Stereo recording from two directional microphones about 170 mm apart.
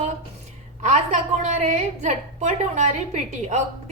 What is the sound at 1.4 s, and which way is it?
A woman's voice, 45° right (ahead or behind).